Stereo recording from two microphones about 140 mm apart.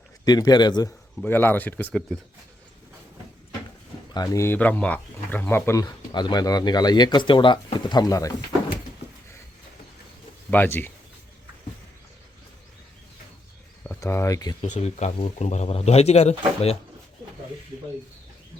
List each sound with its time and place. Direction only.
0.3 s speech: 30° left (ahead or behind)
1.2 s speech: 15° left (ahead or behind)
1.9 s speech: centre (ahead or behind)
4.1 s speech: 25° left (ahead or behind)
10.5 s speech: 15° left (ahead or behind)
14.0 s speech: 20° left (ahead or behind)
14.6 s a man's voice: 50° left (ahead or behind)